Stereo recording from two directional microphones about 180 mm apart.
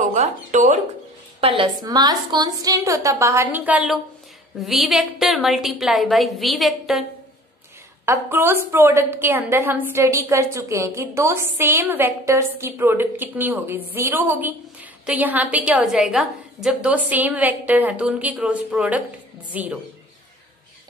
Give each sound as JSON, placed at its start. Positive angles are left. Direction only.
{"t": 0.1, "sound": "speech", "side_deg": -40}
{"t": 1.6, "sound": "a woman's voice", "side_deg": -20}
{"t": 8.0, "sound": "a woman's voice", "side_deg": -15}